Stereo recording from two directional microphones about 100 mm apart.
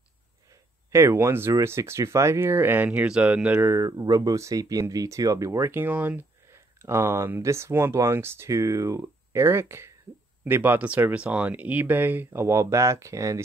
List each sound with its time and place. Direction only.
0.9 s speech: 25° right (ahead or behind)
3.7 s speech: 35° right (ahead or behind)